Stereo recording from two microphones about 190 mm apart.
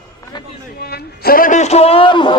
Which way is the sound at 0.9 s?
50° left (ahead or behind).